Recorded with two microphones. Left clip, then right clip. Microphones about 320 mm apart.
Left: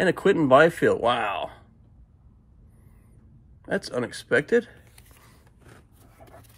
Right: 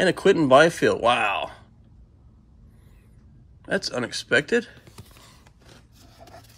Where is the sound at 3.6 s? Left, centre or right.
Centre.